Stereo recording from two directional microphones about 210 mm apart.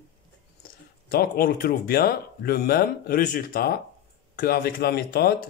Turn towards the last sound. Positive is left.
turn(degrees=50)  # may be behind; listen again after turning